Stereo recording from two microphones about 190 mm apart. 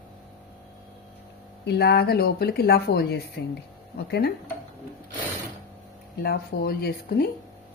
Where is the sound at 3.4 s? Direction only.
70° left (ahead or behind).